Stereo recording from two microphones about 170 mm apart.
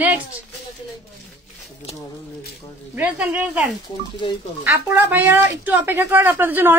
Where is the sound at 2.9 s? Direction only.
10° right (ahead or behind).